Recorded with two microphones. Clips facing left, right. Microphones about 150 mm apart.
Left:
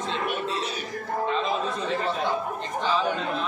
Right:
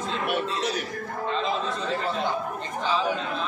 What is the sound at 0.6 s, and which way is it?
Speech, 90° right.